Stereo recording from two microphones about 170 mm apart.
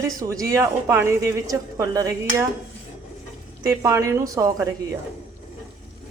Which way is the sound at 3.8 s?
20° right (ahead or behind).